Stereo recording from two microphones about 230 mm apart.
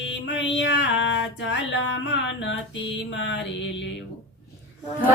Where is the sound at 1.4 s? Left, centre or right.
Left.